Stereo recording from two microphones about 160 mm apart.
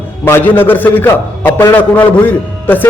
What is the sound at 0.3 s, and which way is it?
A man's voice, 10° left (ahead or behind).